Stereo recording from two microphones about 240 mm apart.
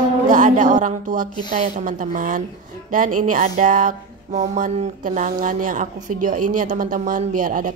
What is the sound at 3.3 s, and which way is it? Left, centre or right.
Speech, right.